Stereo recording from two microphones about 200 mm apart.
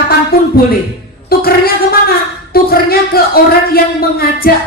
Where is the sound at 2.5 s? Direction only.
50° left (ahead or behind).